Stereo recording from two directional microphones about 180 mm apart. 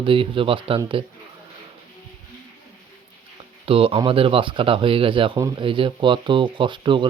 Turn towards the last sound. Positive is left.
turn(degrees=-25)  # may be behind; listen again after turning